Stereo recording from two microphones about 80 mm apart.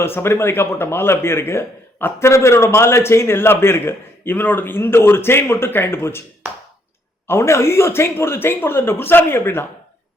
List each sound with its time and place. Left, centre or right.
0.0 s speech: left
7.3 s speech: left